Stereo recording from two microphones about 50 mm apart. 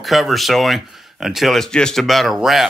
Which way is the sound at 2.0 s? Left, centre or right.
Centre.